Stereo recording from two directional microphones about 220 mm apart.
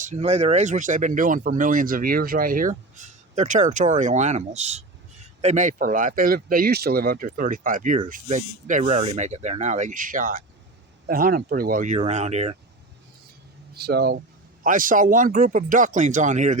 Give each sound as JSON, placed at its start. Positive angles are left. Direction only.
{"t": 0.0, "sound": "speech", "side_deg": -30}
{"t": 13.7, "sound": "speech", "side_deg": -45}